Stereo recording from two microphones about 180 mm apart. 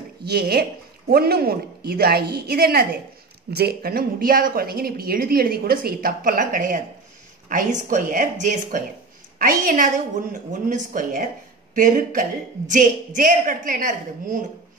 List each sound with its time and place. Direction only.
0.2 s a woman's voice: 60° right (ahead or behind)